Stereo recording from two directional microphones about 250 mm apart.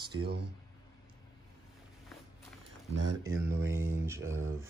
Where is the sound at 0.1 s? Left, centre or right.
Right.